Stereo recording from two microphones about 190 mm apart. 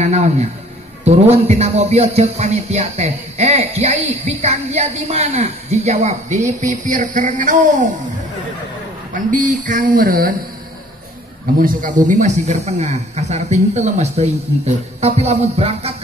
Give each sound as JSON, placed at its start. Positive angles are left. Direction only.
{"t": 0.0, "sound": "a man's voice", "side_deg": -35}
{"t": 9.1, "sound": "speech", "side_deg": -45}
{"t": 11.6, "sound": "speech", "side_deg": -45}